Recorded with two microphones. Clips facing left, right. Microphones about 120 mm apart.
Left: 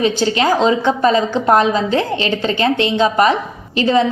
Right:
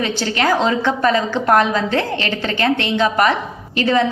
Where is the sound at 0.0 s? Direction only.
20° left (ahead or behind).